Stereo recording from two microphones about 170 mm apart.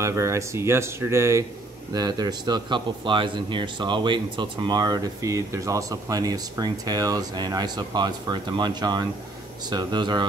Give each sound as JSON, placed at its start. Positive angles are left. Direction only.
{"t": 0.0, "sound": "a man's voice", "side_deg": -15}